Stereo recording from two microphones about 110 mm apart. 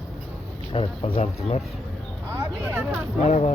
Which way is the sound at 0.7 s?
55° left (ahead or behind).